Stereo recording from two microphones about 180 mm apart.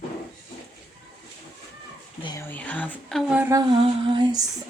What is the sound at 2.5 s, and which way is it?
Speech, 10° left (ahead or behind).